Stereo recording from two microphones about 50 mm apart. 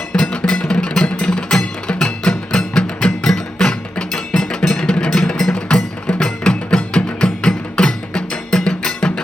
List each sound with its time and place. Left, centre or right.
0.1 s music: centre